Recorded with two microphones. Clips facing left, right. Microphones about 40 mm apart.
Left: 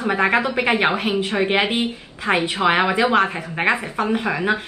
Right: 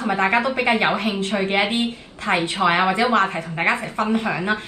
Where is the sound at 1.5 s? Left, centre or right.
Left.